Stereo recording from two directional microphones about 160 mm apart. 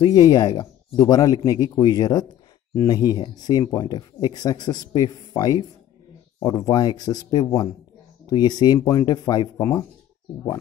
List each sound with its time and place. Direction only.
0.0 s speech: 25° left (ahead or behind)
9.6 s speech: 15° left (ahead or behind)